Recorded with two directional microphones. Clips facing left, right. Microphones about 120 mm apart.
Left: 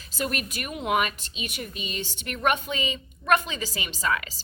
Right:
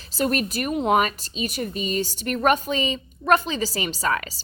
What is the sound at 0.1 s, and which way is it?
A woman's voice, 35° right (ahead or behind).